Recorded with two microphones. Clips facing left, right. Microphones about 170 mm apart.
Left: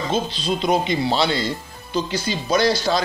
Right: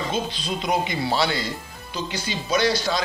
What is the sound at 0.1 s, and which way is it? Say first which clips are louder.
A man's voice: left 4 dB; 30° left (ahead or behind).